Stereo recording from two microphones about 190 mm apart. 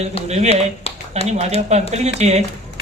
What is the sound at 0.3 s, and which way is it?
Speech, 35° right (ahead or behind).